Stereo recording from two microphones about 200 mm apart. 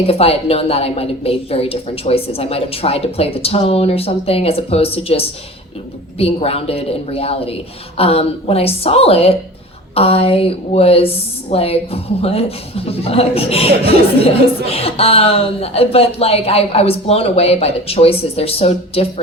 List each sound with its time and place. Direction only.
0.1 s a woman's voice: 30° left (ahead or behind)